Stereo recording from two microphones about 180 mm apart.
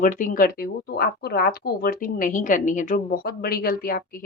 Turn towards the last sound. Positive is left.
turn(degrees=55)  # may be behind; listen again after turning